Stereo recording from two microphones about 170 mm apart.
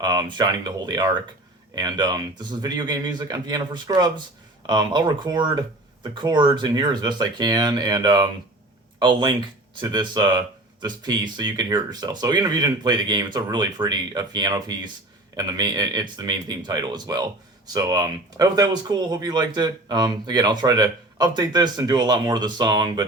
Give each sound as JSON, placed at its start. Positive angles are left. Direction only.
{"t": 0.0, "sound": "speech", "side_deg": -25}